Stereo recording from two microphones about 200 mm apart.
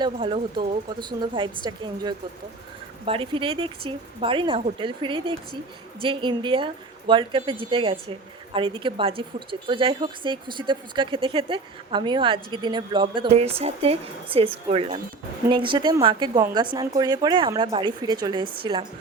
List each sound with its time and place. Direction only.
0.0 s a woman's voice: 25° right (ahead or behind)